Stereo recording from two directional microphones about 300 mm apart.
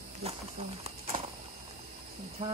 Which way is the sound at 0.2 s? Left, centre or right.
Right.